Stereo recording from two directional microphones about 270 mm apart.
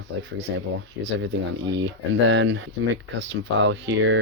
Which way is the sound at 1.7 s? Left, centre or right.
Right.